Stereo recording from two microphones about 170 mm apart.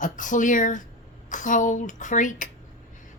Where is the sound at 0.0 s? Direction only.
50° left (ahead or behind).